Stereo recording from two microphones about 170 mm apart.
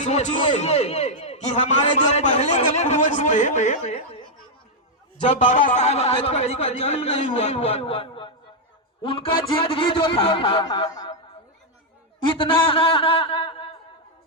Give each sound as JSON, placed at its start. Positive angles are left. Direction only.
{"t": 0.0, "sound": "a man's voice", "side_deg": 45}
{"t": 12.2, "sound": "a man's voice", "side_deg": 30}